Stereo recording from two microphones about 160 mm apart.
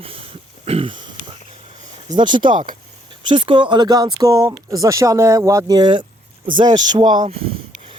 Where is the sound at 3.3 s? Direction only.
30° right (ahead or behind).